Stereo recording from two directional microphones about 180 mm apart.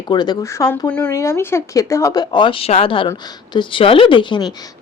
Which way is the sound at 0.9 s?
5° left (ahead or behind).